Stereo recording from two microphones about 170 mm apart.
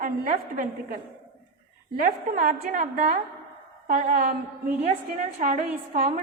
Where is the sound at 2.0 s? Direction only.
50° right (ahead or behind).